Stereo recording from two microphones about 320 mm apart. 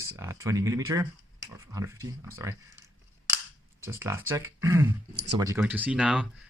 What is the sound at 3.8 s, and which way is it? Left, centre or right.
Speech, centre.